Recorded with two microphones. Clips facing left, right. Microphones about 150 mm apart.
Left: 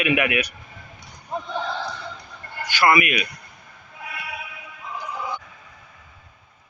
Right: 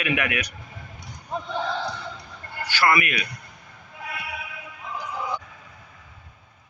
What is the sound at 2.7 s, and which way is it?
Speech, 15° left (ahead or behind).